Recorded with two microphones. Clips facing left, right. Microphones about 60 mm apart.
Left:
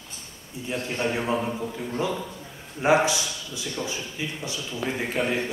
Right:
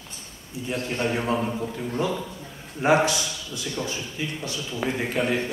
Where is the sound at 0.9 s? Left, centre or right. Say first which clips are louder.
Even; centre.